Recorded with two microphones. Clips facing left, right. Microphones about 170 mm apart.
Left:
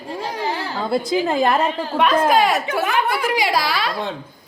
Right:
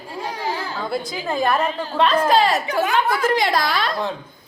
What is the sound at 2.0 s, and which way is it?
A woman's voice, 10° left (ahead or behind).